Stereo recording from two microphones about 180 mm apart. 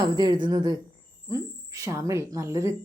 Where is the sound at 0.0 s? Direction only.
25° right (ahead or behind).